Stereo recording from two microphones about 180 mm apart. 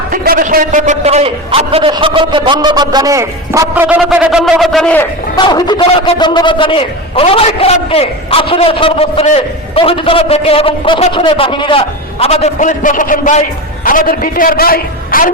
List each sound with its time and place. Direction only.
0.1 s a man's voice: 50° right (ahead or behind); by 3.8 s 15° right (ahead or behind)
3.8 s a man's voice: 5° right (ahead or behind)
5.4 s a man's voice: 25° left (ahead or behind); by 15.3 s 55° left (ahead or behind)